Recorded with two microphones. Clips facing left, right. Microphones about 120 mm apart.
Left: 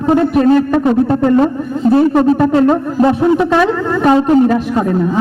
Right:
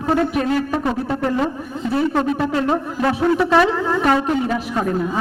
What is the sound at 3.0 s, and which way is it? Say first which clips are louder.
Speech: left 6 dB; 20° left (ahead or behind).